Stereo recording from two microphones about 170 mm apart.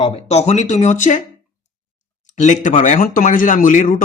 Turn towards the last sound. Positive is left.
turn(degrees=50)  # may be behind; listen again after turning